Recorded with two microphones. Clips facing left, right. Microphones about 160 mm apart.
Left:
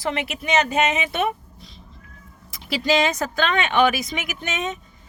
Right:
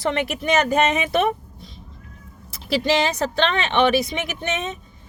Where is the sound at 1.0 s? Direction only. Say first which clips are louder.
Right 4 dB; 35° right (ahead or behind).